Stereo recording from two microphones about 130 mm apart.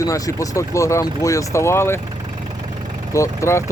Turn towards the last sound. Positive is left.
turn(degrees=20)  # may be behind; listen again after turning